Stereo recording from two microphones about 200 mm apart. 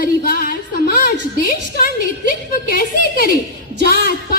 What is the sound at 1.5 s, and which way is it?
A woman's voice, 45° left (ahead or behind).